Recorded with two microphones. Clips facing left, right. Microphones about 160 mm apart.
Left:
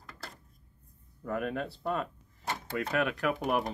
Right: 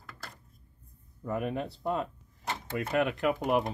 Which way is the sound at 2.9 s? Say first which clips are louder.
Right 3 dB; 20° right (ahead or behind).